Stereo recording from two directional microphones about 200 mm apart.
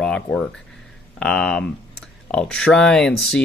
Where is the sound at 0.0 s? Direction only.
Centre (ahead or behind).